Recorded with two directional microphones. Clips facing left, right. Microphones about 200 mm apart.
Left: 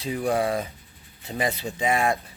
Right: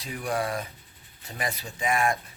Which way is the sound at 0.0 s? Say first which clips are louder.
Left 6 dB; 25° left (ahead or behind).